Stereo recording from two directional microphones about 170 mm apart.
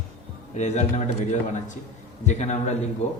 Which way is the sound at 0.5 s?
45° left (ahead or behind).